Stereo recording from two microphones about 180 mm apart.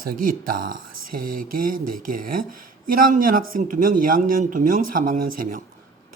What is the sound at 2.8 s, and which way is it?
Speech, 50° right (ahead or behind).